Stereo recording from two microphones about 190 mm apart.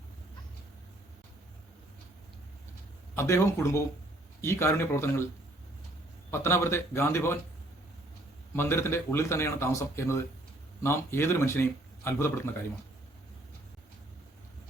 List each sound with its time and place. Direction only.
3.2 s speech: 15° left (ahead or behind)
6.3 s speech: 15° left (ahead or behind)
8.5 s speech: 15° left (ahead or behind)